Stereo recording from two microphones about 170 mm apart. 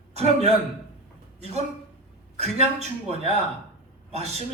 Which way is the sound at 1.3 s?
40° right (ahead or behind).